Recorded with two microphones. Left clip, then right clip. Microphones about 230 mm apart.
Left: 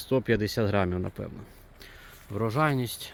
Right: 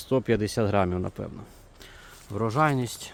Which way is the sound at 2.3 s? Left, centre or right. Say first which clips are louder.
Right 2 dB; centre.